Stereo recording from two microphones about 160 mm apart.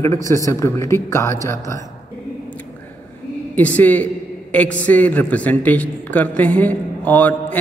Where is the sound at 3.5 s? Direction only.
10° left (ahead or behind).